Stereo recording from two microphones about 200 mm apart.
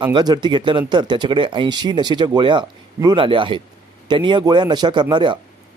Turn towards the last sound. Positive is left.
turn(degrees=-20)  # may be behind; listen again after turning